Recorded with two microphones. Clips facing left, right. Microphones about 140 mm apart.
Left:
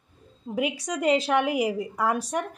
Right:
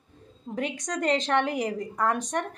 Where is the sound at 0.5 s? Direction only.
10° left (ahead or behind).